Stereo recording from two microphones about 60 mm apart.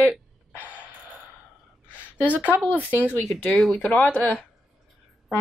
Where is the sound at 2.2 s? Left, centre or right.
Left.